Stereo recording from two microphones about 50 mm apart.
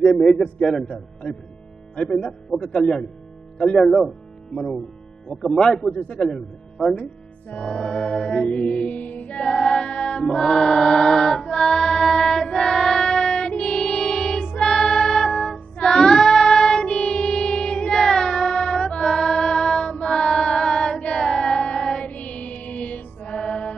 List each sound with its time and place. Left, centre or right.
0.0 s a man's voice: centre
2.0 s mantra: centre
3.7 s speech: centre
5.3 s speech: centre
5.9 s mantra: centre
6.8 s speech: centre
7.6 s mantra: centre
8.5 s music: left
9.4 s chant: centre
10.2 s music: centre
22.0 s music: left
23.3 s music: centre